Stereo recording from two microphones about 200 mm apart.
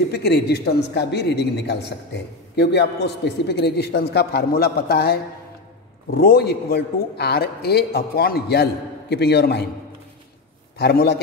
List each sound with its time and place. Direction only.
0.1 s a man's voice: 55° left (ahead or behind)
10.8 s a man's voice: 50° left (ahead or behind)